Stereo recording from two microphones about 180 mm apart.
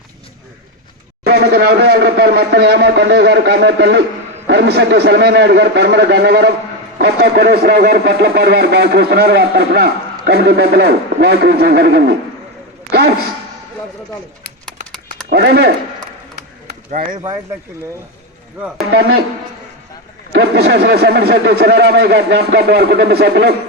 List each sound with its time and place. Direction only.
1.2 s a man's voice: 60° right (ahead or behind)
15.3 s speech: 65° right (ahead or behind)
16.3 s a sound: 45° right (ahead or behind)
18.9 s speech: 90° right
20.3 s speech: 70° right (ahead or behind)